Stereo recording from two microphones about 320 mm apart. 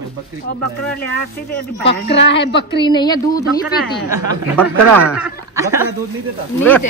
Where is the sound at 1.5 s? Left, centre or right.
Left.